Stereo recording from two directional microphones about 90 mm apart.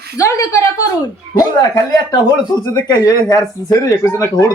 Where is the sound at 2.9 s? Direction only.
45° left (ahead or behind).